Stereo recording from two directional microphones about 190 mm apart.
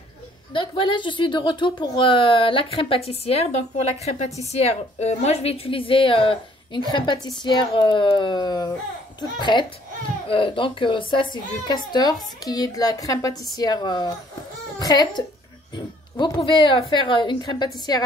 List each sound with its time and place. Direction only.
0.5 s a woman's voice: 25° left (ahead or behind)
15.7 s a sound: 25° left (ahead or behind)
16.9 s a woman's voice: 25° left (ahead or behind)